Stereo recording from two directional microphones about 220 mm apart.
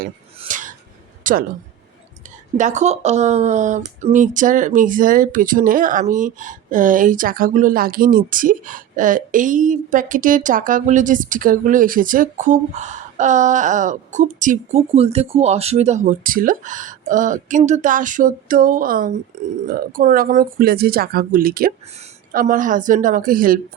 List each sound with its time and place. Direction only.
0.0 s speech: 35° right (ahead or behind)
2.6 s a woman's voice: 35° right (ahead or behind)